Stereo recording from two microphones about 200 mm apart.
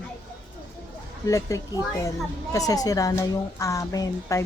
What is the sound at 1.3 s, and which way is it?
A woman's voice, 15° left (ahead or behind).